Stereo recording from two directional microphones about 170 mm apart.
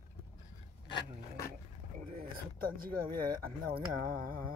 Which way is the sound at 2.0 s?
55° right (ahead or behind).